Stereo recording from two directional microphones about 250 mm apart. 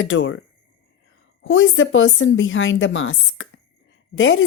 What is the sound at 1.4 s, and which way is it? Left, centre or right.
A woman's voice, left.